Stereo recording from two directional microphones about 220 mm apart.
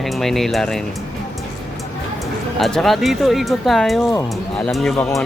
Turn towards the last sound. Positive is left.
turn(degrees=0)  # may be behind; listen again after turning